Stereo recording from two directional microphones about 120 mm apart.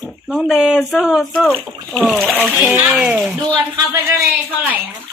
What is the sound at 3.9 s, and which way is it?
Speech, 20° right (ahead or behind).